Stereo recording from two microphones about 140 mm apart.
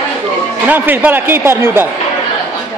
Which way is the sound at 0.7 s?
15° right (ahead or behind).